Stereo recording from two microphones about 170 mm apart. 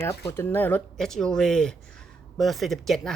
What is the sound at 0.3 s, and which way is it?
Speech, 10° left (ahead or behind).